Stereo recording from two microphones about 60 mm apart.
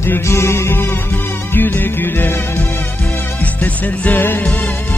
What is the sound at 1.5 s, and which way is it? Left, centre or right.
Music, left.